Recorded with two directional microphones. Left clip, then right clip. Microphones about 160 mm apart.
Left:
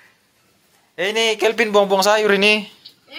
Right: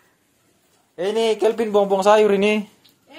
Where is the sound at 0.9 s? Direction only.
15° right (ahead or behind).